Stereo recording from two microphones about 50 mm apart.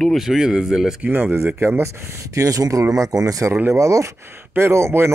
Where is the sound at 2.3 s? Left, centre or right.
Right.